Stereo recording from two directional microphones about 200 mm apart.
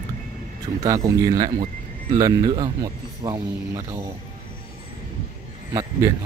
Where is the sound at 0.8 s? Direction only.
15° right (ahead or behind).